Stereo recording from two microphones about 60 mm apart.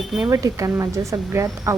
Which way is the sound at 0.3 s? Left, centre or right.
Right.